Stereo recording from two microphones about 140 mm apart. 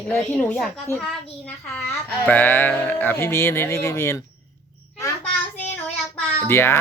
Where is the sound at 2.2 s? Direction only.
15° left (ahead or behind).